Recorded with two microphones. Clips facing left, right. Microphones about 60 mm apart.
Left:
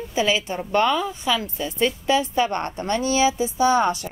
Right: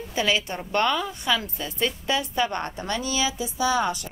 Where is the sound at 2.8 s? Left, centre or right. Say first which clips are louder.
Left 8 dB; left.